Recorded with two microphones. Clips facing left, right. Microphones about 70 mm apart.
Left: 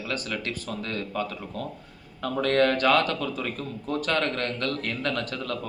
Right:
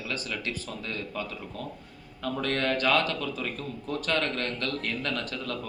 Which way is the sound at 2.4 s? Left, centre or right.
Left.